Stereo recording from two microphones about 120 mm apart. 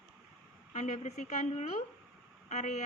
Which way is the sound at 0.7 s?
75° left (ahead or behind).